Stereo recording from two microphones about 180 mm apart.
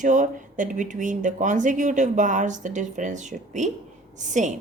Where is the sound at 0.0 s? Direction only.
45° right (ahead or behind).